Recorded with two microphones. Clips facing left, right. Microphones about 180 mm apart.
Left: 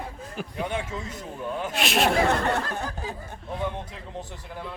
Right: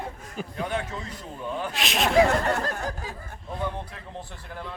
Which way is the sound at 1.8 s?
Centre (ahead or behind).